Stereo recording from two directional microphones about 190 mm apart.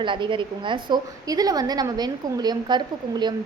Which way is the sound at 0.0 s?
25° right (ahead or behind).